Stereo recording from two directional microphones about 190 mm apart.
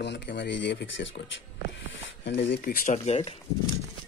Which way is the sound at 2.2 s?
65° left (ahead or behind).